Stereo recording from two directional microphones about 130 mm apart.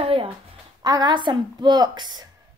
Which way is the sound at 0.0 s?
45° right (ahead or behind).